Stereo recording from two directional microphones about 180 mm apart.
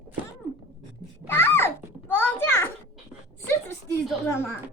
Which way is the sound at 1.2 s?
10° left (ahead or behind).